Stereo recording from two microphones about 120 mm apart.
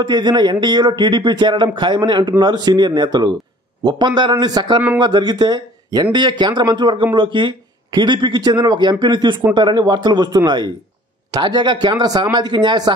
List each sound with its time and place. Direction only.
0.0 s speech: 40° right (ahead or behind)